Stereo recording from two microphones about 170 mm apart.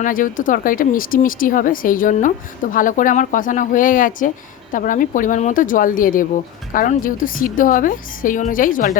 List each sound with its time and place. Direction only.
0.0 s speech: 50° left (ahead or behind)